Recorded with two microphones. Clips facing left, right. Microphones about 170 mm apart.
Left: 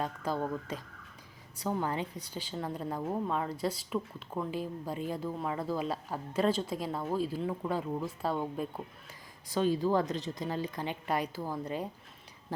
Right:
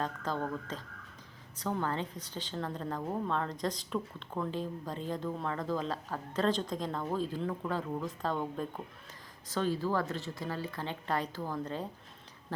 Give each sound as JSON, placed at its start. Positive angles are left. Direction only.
{"t": 0.0, "sound": "a woman's voice", "side_deg": 10}